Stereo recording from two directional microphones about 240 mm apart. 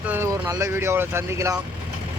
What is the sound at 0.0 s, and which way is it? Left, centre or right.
Speech, centre.